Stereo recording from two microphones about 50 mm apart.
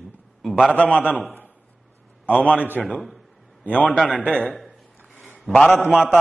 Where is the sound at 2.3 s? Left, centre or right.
Left.